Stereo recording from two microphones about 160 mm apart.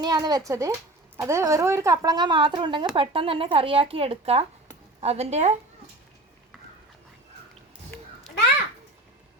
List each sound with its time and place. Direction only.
0.0 s speech: 25° right (ahead or behind); by 5.5 s 45° right (ahead or behind)